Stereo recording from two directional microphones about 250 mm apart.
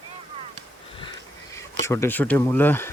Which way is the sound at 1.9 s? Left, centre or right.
Centre.